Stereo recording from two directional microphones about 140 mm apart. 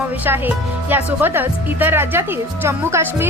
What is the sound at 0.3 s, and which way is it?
A woman's voice, 15° right (ahead or behind).